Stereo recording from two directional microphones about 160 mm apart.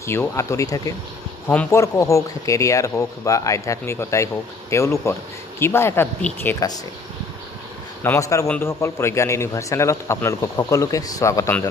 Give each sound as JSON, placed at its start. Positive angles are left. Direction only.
{"t": 0.0, "sound": "a man's voice", "side_deg": 15}
{"t": 8.0, "sound": "a man's voice", "side_deg": 20}